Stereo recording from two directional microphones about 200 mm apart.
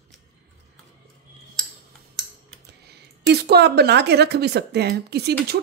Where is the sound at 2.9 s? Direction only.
55° right (ahead or behind).